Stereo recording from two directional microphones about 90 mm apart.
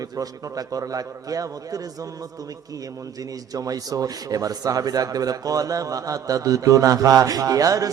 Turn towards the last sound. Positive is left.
turn(degrees=-40)  # may be behind; listen again after turning